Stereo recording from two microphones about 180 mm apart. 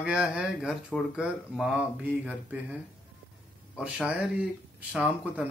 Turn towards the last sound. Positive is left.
turn(degrees=-5)  # may be behind; listen again after turning